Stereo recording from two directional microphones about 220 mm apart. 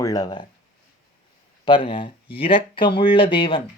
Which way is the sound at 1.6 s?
20° left (ahead or behind).